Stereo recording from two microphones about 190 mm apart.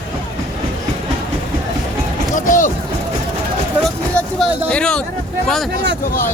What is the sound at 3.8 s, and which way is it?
Speech, 5° left (ahead or behind).